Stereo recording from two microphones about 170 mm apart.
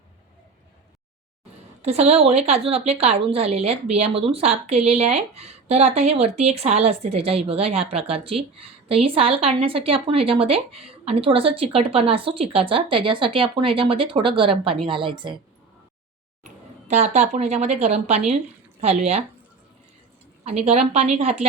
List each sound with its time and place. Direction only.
1.8 s a woman's voice: 40° right (ahead or behind)
16.9 s a woman's voice: 45° right (ahead or behind)
20.4 s a woman's voice: 40° right (ahead or behind)